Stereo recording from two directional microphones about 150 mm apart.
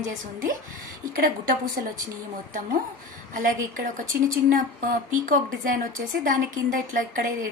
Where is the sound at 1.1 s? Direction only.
70° right (ahead or behind).